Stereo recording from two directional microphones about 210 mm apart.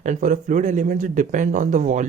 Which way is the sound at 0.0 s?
35° right (ahead or behind).